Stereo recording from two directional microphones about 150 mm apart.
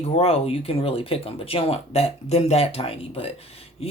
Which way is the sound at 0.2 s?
40° left (ahead or behind).